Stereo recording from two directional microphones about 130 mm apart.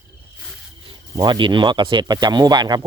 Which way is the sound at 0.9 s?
35° right (ahead or behind).